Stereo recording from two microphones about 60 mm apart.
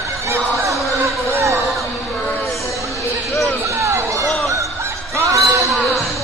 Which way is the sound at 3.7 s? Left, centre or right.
Right.